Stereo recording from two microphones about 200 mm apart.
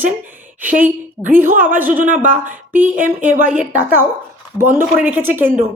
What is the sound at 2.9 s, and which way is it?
Speech, 40° right (ahead or behind).